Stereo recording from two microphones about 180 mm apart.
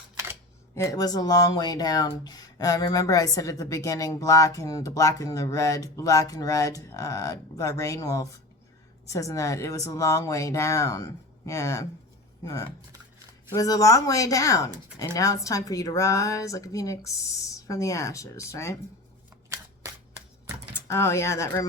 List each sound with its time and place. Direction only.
0.8 s a woman's voice: 20° left (ahead or behind)
20.8 s a woman's voice: 15° left (ahead or behind)